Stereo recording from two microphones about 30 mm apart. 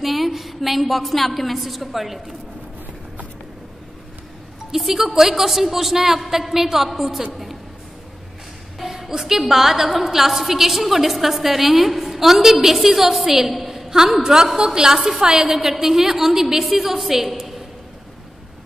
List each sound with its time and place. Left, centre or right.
0.0 s a woman's voice: centre
4.6 s a woman's voice: centre
8.7 s a sound: centre
9.5 s a woman's voice: centre
13.8 s a sound: centre
14.2 s a woman's voice: centre